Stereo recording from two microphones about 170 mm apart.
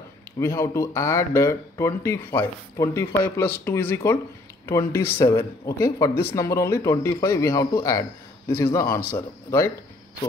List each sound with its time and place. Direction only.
0.4 s speech: 15° left (ahead or behind)